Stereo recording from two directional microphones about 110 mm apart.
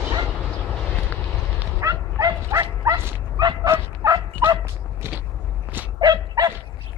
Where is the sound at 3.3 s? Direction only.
30° right (ahead or behind).